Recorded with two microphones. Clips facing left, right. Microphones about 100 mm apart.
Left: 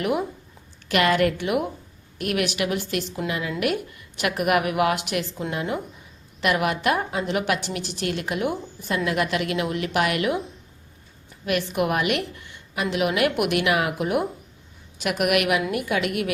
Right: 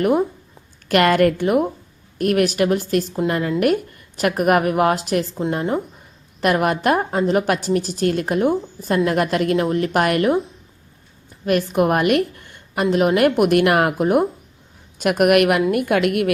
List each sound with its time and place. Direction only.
0.0 s a woman's voice: 40° right (ahead or behind)
0.9 s a woman's voice: 50° right (ahead or behind)
11.4 s a woman's voice: 40° right (ahead or behind)